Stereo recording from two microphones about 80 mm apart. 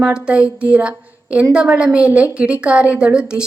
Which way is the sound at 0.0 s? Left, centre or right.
Centre.